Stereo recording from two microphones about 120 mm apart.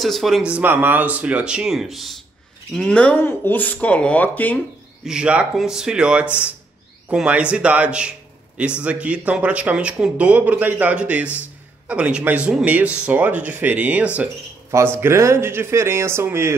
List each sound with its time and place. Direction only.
0.0 s speech: centre (ahead or behind)
0.5 s speech: 15° right (ahead or behind); by 4.6 s 15° left (ahead or behind)
5.0 s speech: 5° right (ahead or behind)